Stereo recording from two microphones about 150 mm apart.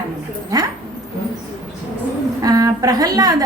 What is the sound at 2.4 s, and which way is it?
Speech, 25° right (ahead or behind).